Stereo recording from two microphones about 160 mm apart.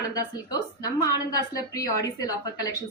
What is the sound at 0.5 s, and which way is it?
A woman's voice, 20° left (ahead or behind).